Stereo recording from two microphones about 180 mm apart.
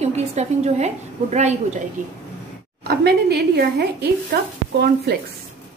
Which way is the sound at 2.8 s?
60° right (ahead or behind).